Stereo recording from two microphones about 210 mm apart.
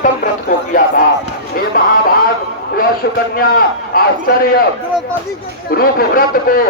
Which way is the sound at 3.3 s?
45° left (ahead or behind).